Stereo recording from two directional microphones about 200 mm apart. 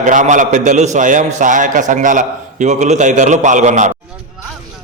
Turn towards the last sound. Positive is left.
turn(degrees=-35)  # may be behind; listen again after turning